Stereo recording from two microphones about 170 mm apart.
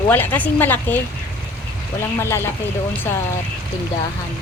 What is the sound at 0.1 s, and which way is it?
Speech, 10° left (ahead or behind).